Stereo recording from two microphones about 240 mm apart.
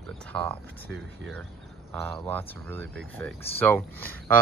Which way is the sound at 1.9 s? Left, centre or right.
Centre.